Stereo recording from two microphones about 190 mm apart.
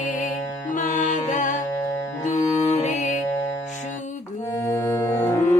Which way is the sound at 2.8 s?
40° left (ahead or behind).